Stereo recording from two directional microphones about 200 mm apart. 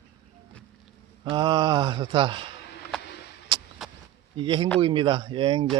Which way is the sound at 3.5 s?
25° right (ahead or behind).